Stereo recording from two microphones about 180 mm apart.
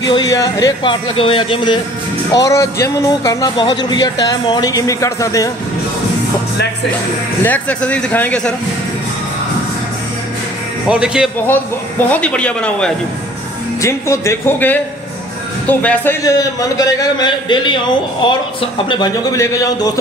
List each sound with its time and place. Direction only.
0.1 s a man's voice: 20° left (ahead or behind)
7.4 s speech: 10° left (ahead or behind)
10.9 s speech: 5° right (ahead or behind)
11.4 s speech: 10° left (ahead or behind)
13.7 s a man's voice: 15° left (ahead or behind)